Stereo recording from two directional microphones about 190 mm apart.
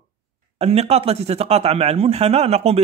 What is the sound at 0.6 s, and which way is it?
Speech, 35° right (ahead or behind).